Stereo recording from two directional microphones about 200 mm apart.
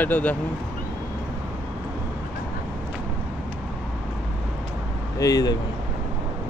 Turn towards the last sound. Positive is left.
turn(degrees=20)  # may be behind; listen again after turning